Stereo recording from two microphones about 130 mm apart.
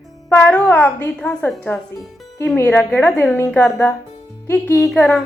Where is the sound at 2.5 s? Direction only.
15° left (ahead or behind).